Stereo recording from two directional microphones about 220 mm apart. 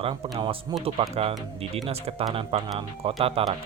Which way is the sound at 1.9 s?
25° right (ahead or behind).